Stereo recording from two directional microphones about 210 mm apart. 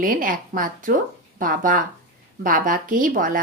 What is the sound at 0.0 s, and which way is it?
A woman's voice, 40° right (ahead or behind).